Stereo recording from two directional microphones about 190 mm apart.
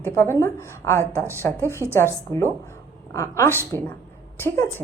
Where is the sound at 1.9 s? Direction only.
15° left (ahead or behind).